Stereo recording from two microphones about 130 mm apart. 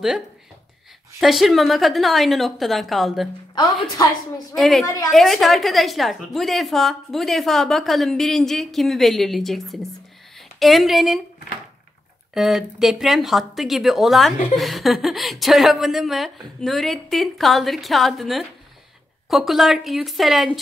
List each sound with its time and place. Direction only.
1.2 s speech: centre (ahead or behind)
4.6 s speech: centre (ahead or behind)
4.8 s a woman's voice: 25° left (ahead or behind)
5.1 s speech: centre (ahead or behind)
12.4 s speech: centre (ahead or behind)